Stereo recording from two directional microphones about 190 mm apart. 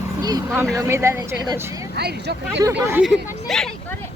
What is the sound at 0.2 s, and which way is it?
Speech, 20° right (ahead or behind).